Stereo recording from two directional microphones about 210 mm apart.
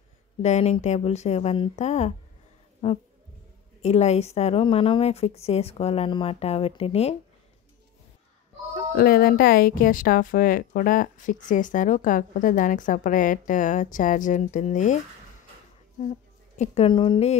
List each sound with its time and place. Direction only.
0.4 s a woman's voice: 30° left (ahead or behind)
8.9 s a woman's voice: 45° left (ahead or behind)
16.0 s a woman's voice: 35° left (ahead or behind)